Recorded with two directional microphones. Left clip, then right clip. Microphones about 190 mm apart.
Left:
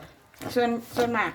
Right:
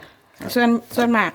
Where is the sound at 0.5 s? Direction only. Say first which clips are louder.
Right 6 dB; 60° right (ahead or behind).